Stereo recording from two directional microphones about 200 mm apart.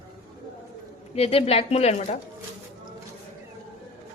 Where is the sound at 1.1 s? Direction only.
30° left (ahead or behind).